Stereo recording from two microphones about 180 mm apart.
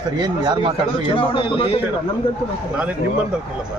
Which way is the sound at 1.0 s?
30° left (ahead or behind).